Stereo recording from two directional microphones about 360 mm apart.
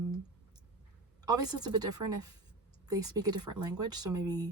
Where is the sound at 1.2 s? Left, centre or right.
Centre.